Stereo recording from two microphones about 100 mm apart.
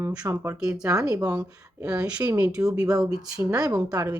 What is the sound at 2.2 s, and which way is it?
Speech, 15° right (ahead or behind).